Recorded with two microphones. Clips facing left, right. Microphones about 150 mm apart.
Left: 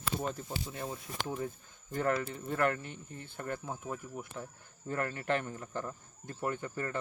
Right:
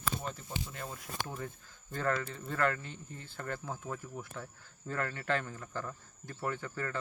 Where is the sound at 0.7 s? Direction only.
15° left (ahead or behind).